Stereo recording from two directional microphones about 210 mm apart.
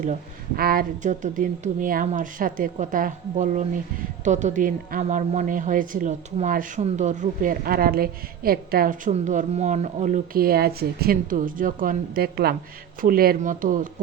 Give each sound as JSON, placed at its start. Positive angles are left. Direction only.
{"t": 0.5, "sound": "a woman's voice", "side_deg": -45}